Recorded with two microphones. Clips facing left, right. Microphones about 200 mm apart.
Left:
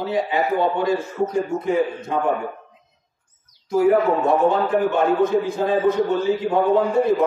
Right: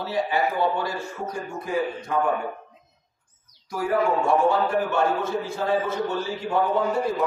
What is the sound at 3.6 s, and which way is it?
A man's voice, 25° left (ahead or behind).